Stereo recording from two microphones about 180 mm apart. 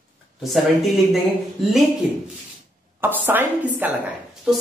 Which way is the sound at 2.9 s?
10° right (ahead or behind).